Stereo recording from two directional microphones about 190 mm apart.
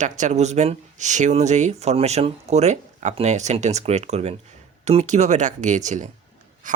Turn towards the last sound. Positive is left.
turn(degrees=-40)  # may be behind; listen again after turning